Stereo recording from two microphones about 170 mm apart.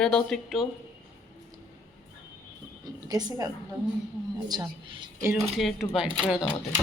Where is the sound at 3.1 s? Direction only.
20° right (ahead or behind).